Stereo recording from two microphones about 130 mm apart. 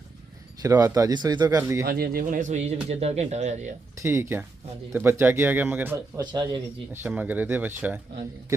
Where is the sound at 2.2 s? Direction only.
80° right; by 3.7 s 60° right (ahead or behind).